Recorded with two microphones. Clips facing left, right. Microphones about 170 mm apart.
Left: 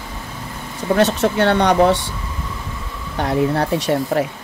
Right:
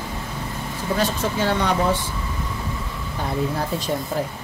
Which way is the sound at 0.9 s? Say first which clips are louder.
Left 7 dB; 70° left (ahead or behind).